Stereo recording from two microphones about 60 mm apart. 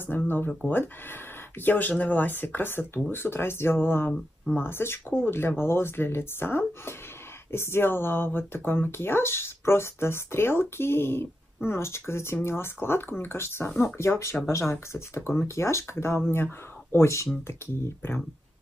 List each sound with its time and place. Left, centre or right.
0.1 s speech: left